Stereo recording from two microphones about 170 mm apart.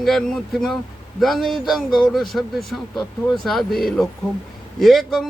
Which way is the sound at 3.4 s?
Centre (ahead or behind).